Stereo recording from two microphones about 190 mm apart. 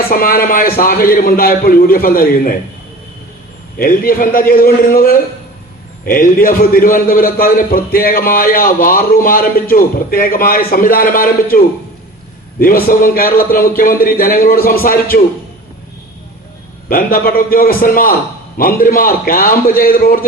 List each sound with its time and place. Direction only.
0.1 s a man's voice: 50° left (ahead or behind)
3.8 s a man's voice: 50° left (ahead or behind)
16.9 s a man's voice: 50° left (ahead or behind)